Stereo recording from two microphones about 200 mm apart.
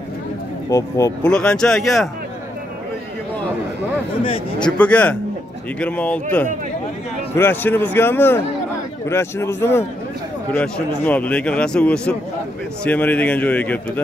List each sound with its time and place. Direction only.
0.7 s a man's voice: 15° left (ahead or behind)
1.2 s speech: 5° left (ahead or behind)
4.2 s a man's voice: 25° left (ahead or behind)
4.7 s a man's voice: 5° left (ahead or behind)
7.3 s a man's voice: 10° left (ahead or behind)
11.1 s a man's voice: 5° left (ahead or behind)